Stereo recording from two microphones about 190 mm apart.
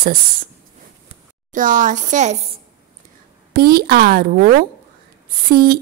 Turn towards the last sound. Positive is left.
turn(degrees=-50)  # may be behind; listen again after turning